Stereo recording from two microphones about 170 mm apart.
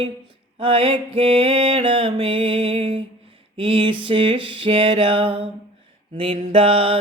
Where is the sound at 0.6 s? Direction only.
35° right (ahead or behind).